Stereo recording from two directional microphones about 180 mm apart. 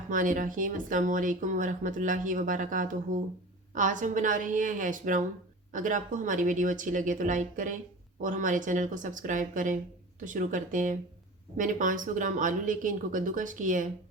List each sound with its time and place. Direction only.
0.1 s speech: 45° right (ahead or behind)